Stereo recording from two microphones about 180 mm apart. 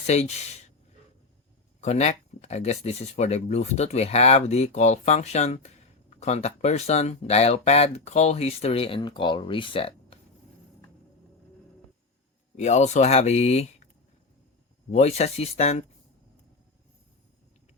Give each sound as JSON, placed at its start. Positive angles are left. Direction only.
{"t": 0.0, "sound": "speech", "side_deg": 40}
{"t": 1.8, "sound": "speech", "side_deg": 40}
{"t": 12.5, "sound": "speech", "side_deg": 40}
{"t": 14.8, "sound": "speech", "side_deg": 40}